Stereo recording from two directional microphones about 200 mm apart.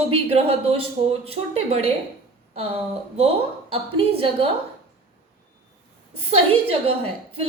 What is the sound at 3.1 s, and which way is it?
A woman's voice, 30° right (ahead or behind).